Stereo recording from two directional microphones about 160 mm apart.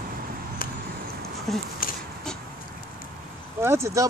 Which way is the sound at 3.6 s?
15° right (ahead or behind).